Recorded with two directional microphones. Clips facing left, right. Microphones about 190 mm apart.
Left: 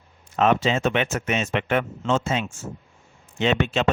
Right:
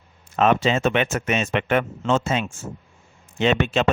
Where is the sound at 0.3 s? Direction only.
60° right (ahead or behind).